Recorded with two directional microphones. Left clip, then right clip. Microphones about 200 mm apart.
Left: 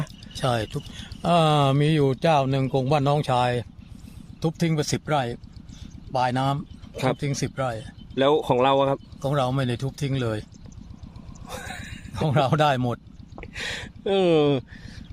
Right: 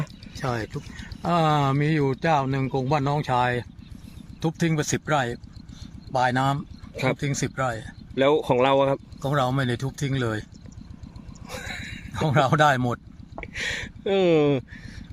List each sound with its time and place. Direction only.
0.3 s speech: 55° left (ahead or behind)
4.4 s speech: 30° left (ahead or behind)
8.1 s speech: 5° left (ahead or behind)
9.2 s speech: 15° left (ahead or behind)
11.4 s a sound: 5° left (ahead or behind)
12.1 s speech: 20° left (ahead or behind)
13.4 s a sound: 5° left (ahead or behind)